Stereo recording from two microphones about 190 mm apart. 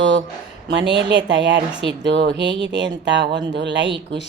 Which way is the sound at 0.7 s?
65° right (ahead or behind).